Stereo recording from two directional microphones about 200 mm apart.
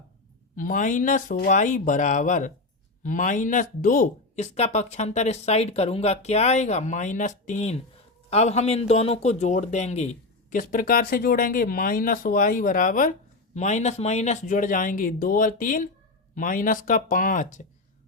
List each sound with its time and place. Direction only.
0.5 s speech: 40° left (ahead or behind)